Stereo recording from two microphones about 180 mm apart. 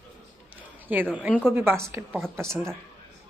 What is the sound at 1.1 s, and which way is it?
Speech, 5° right (ahead or behind).